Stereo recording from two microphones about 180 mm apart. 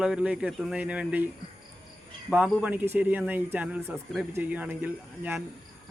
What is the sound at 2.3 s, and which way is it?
Speech, 10° right (ahead or behind).